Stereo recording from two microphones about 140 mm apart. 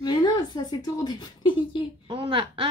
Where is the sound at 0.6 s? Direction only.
30° left (ahead or behind).